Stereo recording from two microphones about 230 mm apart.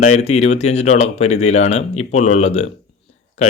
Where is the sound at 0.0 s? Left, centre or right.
Left.